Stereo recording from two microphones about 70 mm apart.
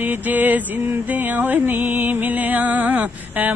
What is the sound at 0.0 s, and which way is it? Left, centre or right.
Music, right.